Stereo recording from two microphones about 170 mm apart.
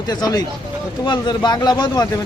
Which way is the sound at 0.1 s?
25° left (ahead or behind).